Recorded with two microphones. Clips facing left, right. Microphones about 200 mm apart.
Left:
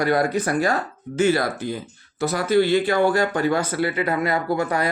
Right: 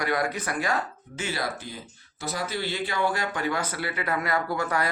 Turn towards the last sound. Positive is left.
turn(degrees=20)  # may be behind; listen again after turning